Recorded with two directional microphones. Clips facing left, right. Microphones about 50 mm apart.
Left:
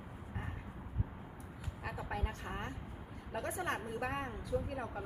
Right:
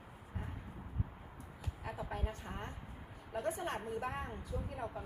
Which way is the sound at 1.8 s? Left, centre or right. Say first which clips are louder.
Left 1 dB; left.